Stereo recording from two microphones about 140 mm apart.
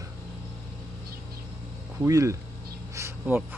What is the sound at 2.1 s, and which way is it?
Speech, 25° right (ahead or behind).